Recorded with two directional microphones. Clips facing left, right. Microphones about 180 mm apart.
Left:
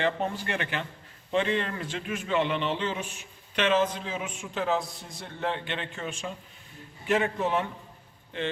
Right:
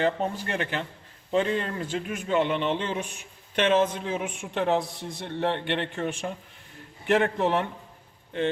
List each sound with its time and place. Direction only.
0.0 s a man's voice: 35° right (ahead or behind)
2.6 s a sound: 45° right (ahead or behind)
3.5 s a woman's voice: 50° right (ahead or behind)